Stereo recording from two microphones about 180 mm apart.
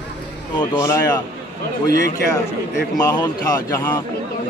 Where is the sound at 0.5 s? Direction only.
25° left (ahead or behind).